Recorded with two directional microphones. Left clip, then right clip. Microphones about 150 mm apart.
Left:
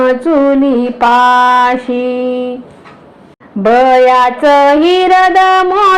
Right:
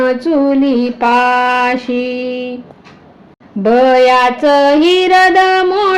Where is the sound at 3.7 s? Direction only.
5° right (ahead or behind).